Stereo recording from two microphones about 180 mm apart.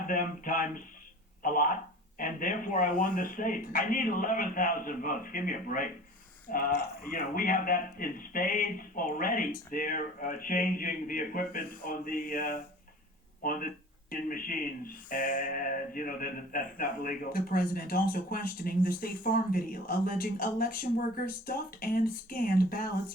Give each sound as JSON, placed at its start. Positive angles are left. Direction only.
{"t": 0.1, "sound": "speech", "side_deg": 50}